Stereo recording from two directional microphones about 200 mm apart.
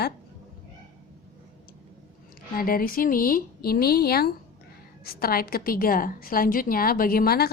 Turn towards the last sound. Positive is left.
turn(degrees=50)  # may be behind; listen again after turning